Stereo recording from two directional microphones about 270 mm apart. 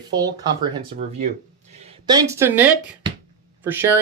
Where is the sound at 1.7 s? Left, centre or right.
Centre.